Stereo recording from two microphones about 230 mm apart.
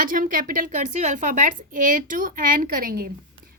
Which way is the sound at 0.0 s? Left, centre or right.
Right.